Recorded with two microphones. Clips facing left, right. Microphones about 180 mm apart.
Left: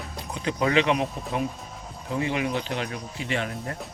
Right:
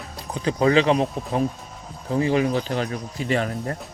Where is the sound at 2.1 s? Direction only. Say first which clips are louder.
Right 6 dB; 35° right (ahead or behind).